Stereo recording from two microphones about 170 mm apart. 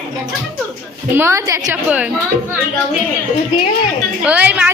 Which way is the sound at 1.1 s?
15° right (ahead or behind).